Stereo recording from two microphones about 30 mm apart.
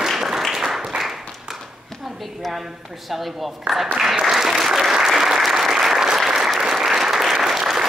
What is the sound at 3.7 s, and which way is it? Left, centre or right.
Speech, centre.